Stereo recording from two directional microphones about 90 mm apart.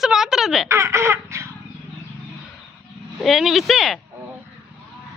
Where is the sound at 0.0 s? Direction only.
5° right (ahead or behind).